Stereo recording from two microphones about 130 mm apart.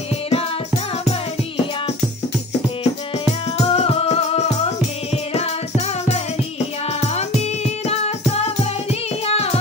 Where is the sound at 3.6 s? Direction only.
50° left (ahead or behind).